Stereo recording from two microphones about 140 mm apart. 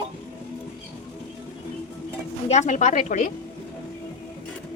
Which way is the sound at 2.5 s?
55° left (ahead or behind).